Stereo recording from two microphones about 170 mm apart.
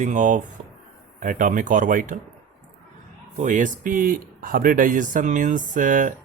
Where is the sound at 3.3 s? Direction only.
45° right (ahead or behind).